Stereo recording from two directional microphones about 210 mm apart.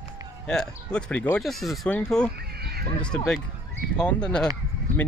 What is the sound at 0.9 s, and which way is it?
Speech, 5° left (ahead or behind).